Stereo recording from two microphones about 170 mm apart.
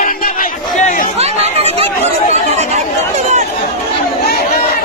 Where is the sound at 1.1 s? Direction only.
40° right (ahead or behind).